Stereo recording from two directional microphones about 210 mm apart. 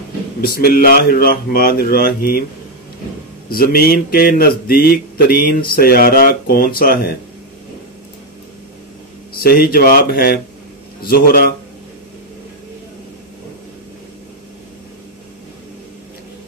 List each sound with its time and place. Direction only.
0.4 s speech: 45° left (ahead or behind)
3.4 s speech: 45° left (ahead or behind)
9.4 s speech: 45° left (ahead or behind)